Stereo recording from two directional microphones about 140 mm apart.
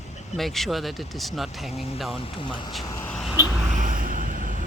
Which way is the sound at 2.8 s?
25° left (ahead or behind).